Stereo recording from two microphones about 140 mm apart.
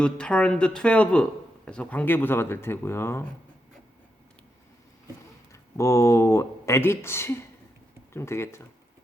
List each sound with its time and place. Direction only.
0.0 s speech: 5° left (ahead or behind)
5.5 s speech: 20° left (ahead or behind)